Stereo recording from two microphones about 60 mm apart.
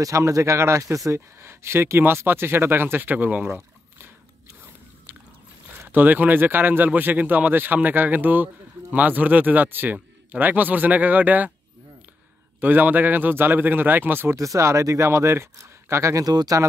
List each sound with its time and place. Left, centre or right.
0.0 s speech: right
1.4 s speech: right
3.4 s a sound: right
5.9 s speech: right
12.5 s speech: right
14.3 s speech: right